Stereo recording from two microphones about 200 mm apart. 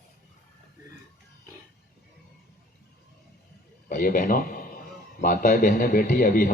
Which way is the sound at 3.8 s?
45° left (ahead or behind).